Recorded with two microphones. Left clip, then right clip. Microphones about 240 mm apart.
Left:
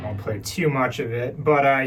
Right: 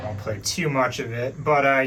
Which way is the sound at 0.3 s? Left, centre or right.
Centre.